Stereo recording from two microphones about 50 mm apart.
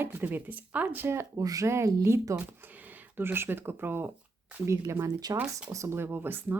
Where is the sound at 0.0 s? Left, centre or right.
Right.